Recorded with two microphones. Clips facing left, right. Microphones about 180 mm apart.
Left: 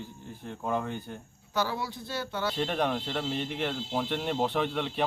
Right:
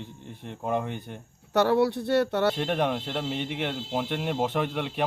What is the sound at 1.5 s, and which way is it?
Speech, 70° right (ahead or behind).